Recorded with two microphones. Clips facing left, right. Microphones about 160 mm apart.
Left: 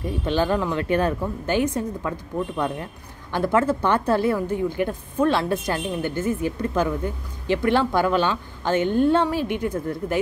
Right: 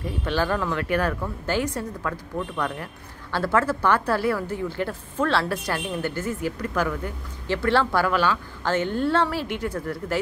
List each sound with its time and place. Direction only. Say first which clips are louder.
0.2 s a woman's voice: left 3 dB; 20° left (ahead or behind)